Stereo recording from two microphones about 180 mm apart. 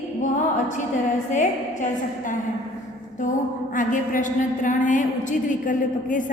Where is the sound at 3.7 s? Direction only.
45° left (ahead or behind).